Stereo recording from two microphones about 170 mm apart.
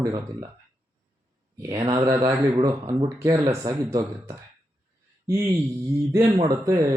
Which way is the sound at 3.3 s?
30° right (ahead or behind).